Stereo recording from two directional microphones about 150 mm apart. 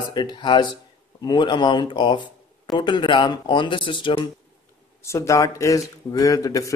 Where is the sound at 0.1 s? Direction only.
30° left (ahead or behind).